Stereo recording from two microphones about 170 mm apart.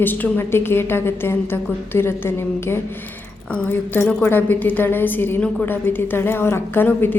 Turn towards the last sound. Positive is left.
turn(degrees=10)  # may be behind; listen again after turning